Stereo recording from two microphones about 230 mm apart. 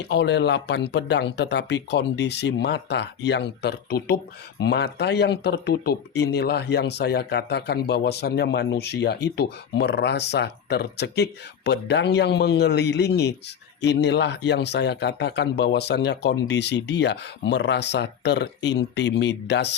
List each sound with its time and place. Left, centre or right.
0.0 s speech: left